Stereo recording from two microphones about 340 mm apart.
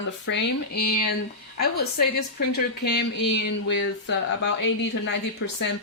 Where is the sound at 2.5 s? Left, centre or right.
Left.